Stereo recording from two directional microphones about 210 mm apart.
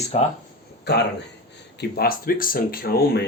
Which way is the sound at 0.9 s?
50° left (ahead or behind).